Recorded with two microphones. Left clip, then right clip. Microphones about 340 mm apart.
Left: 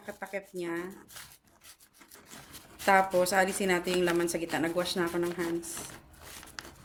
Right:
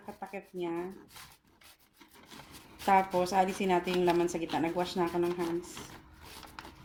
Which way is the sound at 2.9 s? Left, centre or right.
Left.